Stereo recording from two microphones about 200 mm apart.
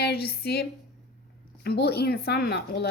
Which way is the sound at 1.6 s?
55° left (ahead or behind).